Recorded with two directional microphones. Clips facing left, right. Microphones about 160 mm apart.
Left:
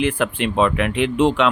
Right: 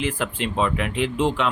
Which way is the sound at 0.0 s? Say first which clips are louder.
Left 5 dB; 65° left (ahead or behind).